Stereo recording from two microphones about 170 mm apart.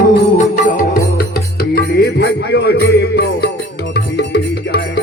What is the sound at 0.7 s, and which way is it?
Music, 60° left (ahead or behind).